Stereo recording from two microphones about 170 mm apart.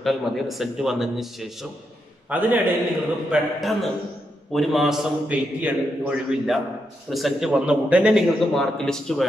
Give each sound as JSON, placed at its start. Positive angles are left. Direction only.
{"t": 0.0, "sound": "a man's voice", "side_deg": 0}
{"t": 3.3, "sound": "a man's voice", "side_deg": 0}